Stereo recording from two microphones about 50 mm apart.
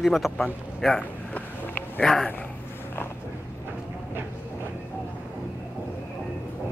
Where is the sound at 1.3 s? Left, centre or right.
Left.